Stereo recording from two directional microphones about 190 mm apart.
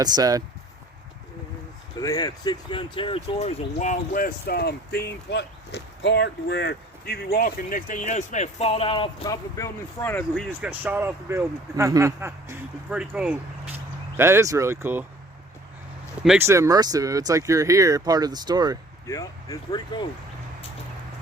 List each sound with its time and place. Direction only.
0.0 s speech: 20° right (ahead or behind)
2.0 s speech: 20° left (ahead or behind)
10.6 s speech: 5° right (ahead or behind)
16.4 s speech: 15° right (ahead or behind)
19.0 s speech: 20° left (ahead or behind)